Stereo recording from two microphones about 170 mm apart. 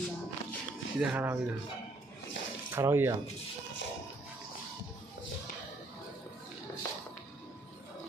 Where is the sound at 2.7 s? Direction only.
15° right (ahead or behind).